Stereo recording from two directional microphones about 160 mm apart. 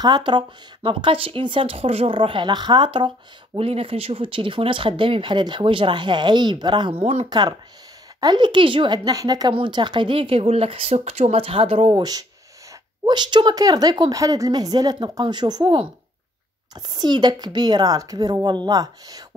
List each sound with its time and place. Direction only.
0.0 s a woman's voice: 30° right (ahead or behind)
7.2 s a woman's voice: 25° right (ahead or behind)